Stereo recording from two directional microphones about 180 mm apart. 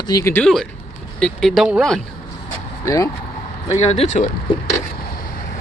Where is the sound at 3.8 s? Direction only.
35° left (ahead or behind).